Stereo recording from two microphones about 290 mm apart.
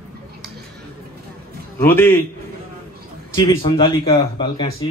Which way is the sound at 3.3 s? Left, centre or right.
Centre.